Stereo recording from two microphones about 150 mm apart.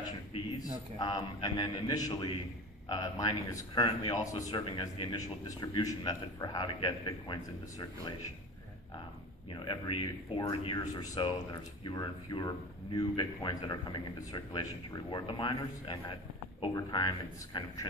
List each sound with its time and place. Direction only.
0.9 s a man's voice: 25° left (ahead or behind)
9.7 s a man's voice: 35° left (ahead or behind)